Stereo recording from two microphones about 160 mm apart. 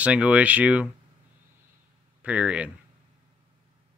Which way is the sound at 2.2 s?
5° right (ahead or behind).